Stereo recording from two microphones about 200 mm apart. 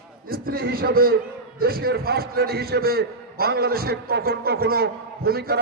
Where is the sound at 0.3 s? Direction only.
50° right (ahead or behind).